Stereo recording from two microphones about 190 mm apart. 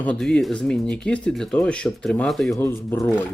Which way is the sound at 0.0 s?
5° left (ahead or behind).